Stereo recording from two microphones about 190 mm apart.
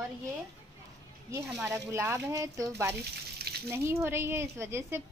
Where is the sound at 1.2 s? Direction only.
10° right (ahead or behind).